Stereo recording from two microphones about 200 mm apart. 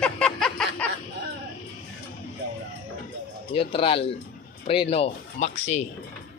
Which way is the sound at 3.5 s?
25° left (ahead or behind).